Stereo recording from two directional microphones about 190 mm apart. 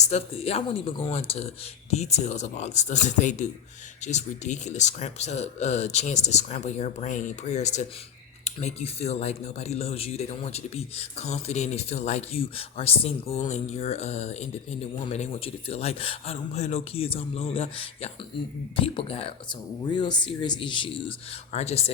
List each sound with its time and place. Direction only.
0.0 s speech: 35° left (ahead or behind)